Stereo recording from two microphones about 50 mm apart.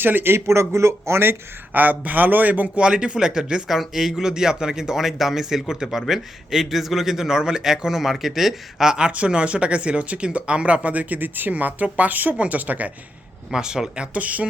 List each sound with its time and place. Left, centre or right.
0.0 s speech: right
0.3 s speech: right
1.7 s speech: right
2.7 s speech: centre
13.5 s speech: centre; by 14.4 s right